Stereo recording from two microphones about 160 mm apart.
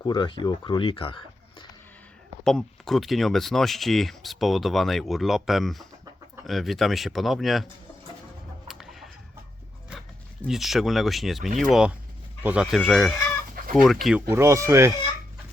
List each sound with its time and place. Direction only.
0.0 s speech: 25° left (ahead or behind)
2.4 s speech: 5° left (ahead or behind)
8.6 s chicken: centre (ahead or behind)
10.4 s speech: centre (ahead or behind)
12.7 s speech: centre (ahead or behind)
14.2 s speech: 15° right (ahead or behind)